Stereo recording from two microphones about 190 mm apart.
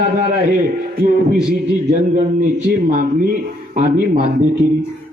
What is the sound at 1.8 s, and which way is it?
A man's voice, 40° right (ahead or behind).